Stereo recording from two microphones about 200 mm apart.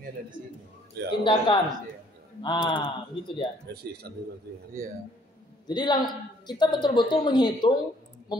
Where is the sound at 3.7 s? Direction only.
55° right (ahead or behind).